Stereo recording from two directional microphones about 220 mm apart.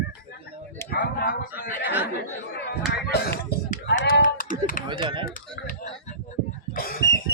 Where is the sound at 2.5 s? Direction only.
50° left (ahead or behind).